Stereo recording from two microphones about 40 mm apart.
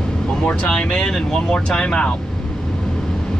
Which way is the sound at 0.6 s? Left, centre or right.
Centre.